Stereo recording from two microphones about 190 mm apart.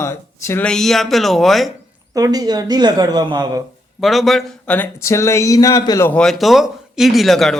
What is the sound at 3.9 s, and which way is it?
Speech, centre (ahead or behind).